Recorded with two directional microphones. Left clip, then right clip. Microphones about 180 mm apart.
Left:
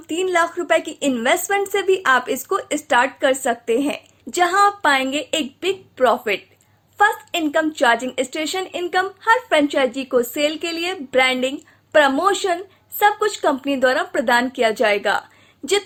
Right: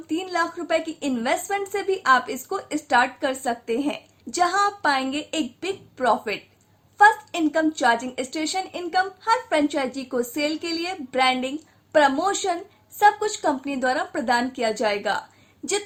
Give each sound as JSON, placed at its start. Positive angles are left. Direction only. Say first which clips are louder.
{"t": 0.3, "sound": "a woman's voice", "louder": "left 7 dB", "side_deg": 30}